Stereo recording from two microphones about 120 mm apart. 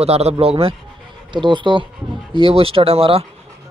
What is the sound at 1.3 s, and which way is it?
Speech, 40° right (ahead or behind).